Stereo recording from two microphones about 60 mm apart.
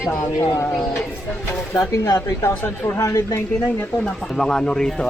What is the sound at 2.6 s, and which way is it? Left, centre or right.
Speech, left.